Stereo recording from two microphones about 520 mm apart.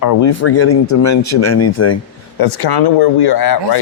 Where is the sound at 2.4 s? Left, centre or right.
Left.